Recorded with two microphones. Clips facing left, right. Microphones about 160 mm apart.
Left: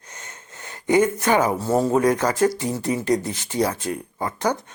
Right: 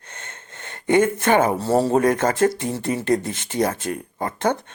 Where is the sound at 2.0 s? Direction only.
50° right (ahead or behind).